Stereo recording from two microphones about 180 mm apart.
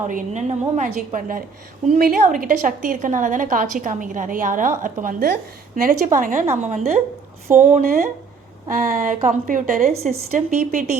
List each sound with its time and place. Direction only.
0.1 s a woman's voice: 45° right (ahead or behind)
7.5 s a woman's voice: 45° right (ahead or behind)